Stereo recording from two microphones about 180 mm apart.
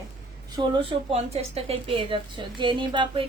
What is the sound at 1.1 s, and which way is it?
A woman's voice, 35° right (ahead or behind).